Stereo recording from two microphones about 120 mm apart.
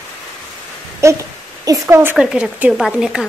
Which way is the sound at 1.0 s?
25° right (ahead or behind).